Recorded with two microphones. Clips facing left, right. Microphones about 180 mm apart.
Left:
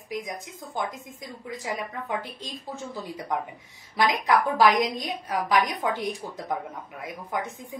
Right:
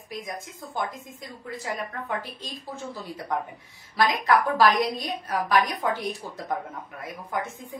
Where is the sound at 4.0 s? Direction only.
20° left (ahead or behind).